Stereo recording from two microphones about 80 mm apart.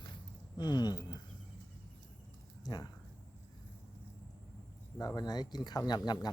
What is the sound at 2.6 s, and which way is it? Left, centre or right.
Speech, left.